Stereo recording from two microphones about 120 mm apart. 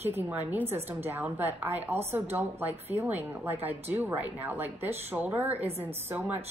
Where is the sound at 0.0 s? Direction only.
15° right (ahead or behind).